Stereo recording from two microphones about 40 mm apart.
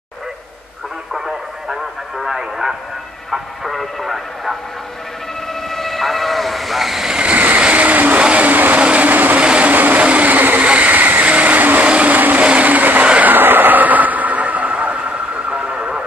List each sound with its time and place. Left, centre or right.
1.1 s radio: centre
3.3 s speech: centre
5.5 s train: centre
7.1 s vehicle: right
7.3 s vehicle: right
8.2 s vehicle: right
8.5 s vehicle: right
8.7 s vehicle: right
9.1 s train: right
9.4 s train: right
9.7 s vehicle: right
10.6 s vehicle: right
13.2 s train: right